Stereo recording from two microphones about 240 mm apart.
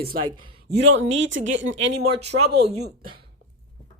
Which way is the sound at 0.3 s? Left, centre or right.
Right.